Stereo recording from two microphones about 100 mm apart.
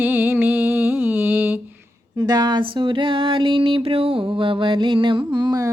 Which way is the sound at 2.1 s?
40° right (ahead or behind).